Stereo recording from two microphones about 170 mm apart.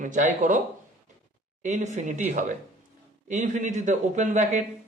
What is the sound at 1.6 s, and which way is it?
Speech, 45° right (ahead or behind).